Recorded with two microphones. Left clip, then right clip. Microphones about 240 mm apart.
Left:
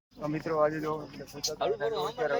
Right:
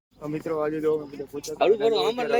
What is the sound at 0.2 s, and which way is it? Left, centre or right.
Speech, centre.